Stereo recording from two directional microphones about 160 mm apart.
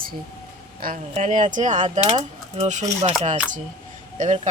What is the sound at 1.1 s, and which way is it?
Speech, 50° right (ahead or behind).